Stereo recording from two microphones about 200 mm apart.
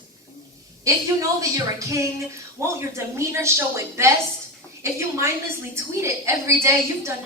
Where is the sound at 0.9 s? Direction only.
15° right (ahead or behind).